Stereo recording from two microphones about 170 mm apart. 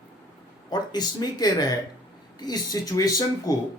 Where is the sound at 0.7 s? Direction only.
25° left (ahead or behind).